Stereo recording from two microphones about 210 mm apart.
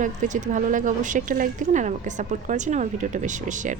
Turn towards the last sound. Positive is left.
turn(degrees=-35)  # may be behind; listen again after turning